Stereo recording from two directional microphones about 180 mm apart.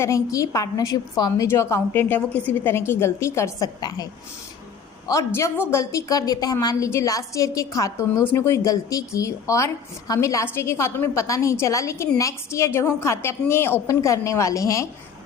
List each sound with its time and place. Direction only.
0.0 s a woman's voice: 15° left (ahead or behind)